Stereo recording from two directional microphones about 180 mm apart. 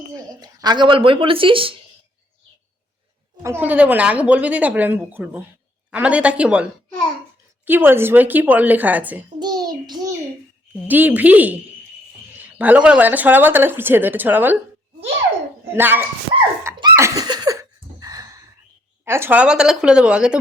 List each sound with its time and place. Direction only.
0.1 s speech: 25° right (ahead or behind)
3.4 s speech: 10° right (ahead or behind)
9.4 s a child's voice: 25° right (ahead or behind)
10.8 s speech: 10° right (ahead or behind)
15.7 s speech: 10° right (ahead or behind)
16.6 s a sound: 15° right (ahead or behind)
19.0 s a woman's voice: 15° right (ahead or behind)